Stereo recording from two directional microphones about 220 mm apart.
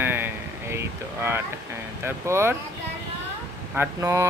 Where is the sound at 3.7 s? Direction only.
15° right (ahead or behind).